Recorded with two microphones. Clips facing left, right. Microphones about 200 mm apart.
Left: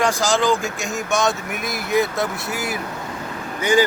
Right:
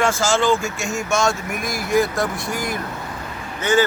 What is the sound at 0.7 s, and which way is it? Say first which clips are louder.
Speech: right 1 dB; centre (ahead or behind).